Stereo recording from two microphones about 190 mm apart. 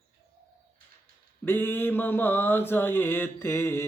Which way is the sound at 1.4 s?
10° left (ahead or behind).